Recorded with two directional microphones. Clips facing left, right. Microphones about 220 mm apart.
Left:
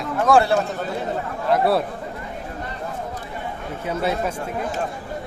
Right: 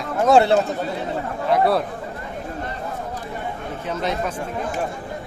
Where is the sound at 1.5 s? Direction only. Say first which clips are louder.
Even; 5° left (ahead or behind).